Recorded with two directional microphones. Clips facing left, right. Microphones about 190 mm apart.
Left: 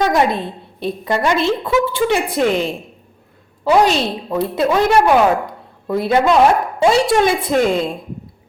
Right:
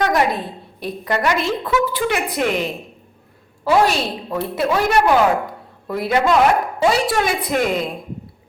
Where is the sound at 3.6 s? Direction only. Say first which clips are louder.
Left 3 dB; 20° left (ahead or behind).